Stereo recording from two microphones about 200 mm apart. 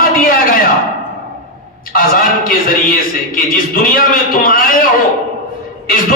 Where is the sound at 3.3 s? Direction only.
45° left (ahead or behind).